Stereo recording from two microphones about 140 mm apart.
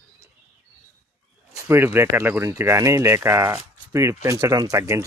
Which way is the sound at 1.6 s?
15° right (ahead or behind).